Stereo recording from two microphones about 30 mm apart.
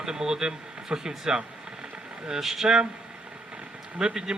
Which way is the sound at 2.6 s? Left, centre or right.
Right.